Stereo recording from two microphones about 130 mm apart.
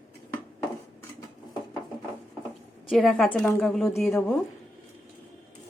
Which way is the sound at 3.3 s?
15° left (ahead or behind).